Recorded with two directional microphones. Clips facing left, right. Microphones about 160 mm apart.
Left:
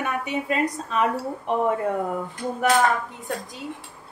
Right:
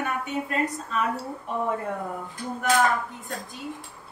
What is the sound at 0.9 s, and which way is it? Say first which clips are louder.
Speech: left 4 dB; 80° left.